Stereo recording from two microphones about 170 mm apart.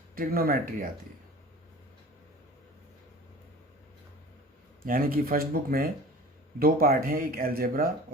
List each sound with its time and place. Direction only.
0.2 s speech: 55° right (ahead or behind)
4.8 s speech: 60° right (ahead or behind)